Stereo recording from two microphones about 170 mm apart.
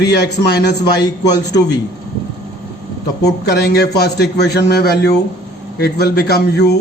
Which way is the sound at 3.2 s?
75° left (ahead or behind).